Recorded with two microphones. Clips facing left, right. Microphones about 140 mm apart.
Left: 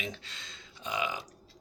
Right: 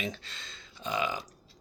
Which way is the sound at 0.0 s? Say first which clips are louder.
Right 3 dB; 15° left (ahead or behind).